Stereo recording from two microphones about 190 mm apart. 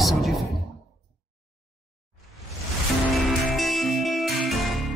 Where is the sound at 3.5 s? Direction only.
Centre (ahead or behind).